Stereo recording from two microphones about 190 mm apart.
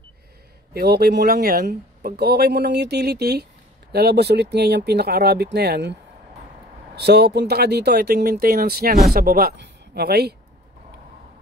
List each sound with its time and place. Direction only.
0.7 s speech: 60° right (ahead or behind)
7.0 s speech: 60° right (ahead or behind)